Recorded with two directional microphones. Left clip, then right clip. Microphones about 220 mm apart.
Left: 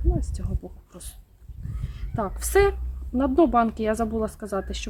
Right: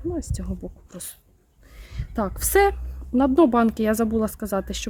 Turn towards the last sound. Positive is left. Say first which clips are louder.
# right 3 dB
turn(degrees=-50)  # may be behind; listen again after turning